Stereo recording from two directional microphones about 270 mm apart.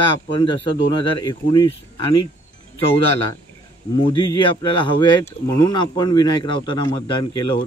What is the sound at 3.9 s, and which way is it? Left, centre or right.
Speech, centre.